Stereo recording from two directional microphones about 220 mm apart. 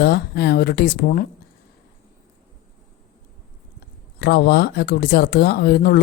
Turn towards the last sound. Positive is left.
turn(degrees=45)  # may be behind; listen again after turning